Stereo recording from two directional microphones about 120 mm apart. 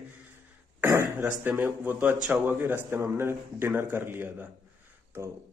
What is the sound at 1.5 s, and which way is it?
A man's voice, 10° right (ahead or behind).